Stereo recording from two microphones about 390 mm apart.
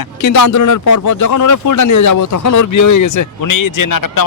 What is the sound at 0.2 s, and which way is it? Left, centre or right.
Speech, left.